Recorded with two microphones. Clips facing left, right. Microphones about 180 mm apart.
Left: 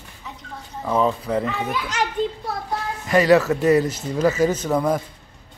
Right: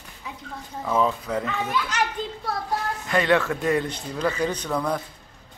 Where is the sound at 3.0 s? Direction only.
5° left (ahead or behind).